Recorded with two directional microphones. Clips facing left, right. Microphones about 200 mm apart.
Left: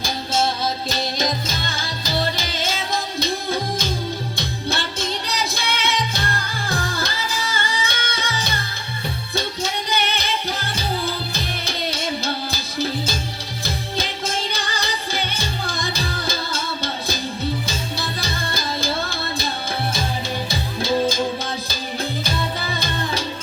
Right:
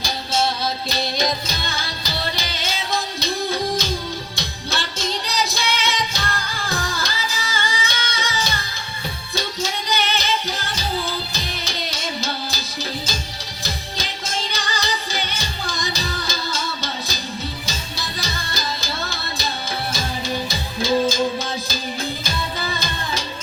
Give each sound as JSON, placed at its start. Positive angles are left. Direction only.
{"t": 0.0, "sound": "music", "side_deg": 50}
{"t": 20.5, "sound": "music", "side_deg": 60}